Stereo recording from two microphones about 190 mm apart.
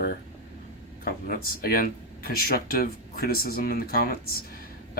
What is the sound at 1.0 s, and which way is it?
Speech, 50° left (ahead or behind).